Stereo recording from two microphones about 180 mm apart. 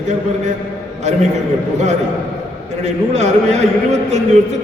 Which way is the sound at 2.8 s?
40° right (ahead or behind).